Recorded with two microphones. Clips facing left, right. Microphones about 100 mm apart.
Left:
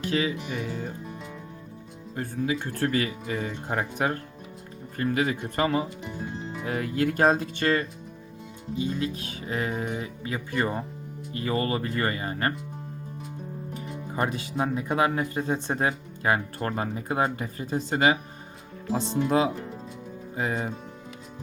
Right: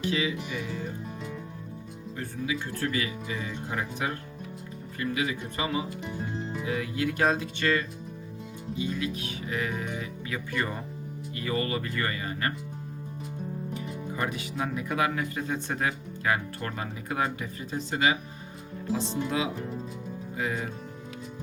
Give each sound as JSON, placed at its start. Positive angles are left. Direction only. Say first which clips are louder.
{"t": 0.0, "sound": "speech", "louder": "left 2 dB", "side_deg": 45}
{"t": 1.0, "sound": "music", "louder": "right 1 dB", "side_deg": 0}
{"t": 2.1, "sound": "speech", "louder": "left 4 dB", "side_deg": 45}
{"t": 13.7, "sound": "music", "louder": "left 5 dB", "side_deg": 35}
{"t": 14.6, "sound": "speech", "louder": "left 4 dB", "side_deg": 30}